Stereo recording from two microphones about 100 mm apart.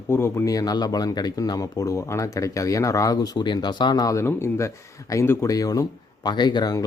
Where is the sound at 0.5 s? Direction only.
40° left (ahead or behind).